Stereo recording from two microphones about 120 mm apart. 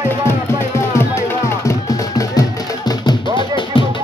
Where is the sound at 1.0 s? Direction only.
25° left (ahead or behind); by 3.8 s 40° left (ahead or behind).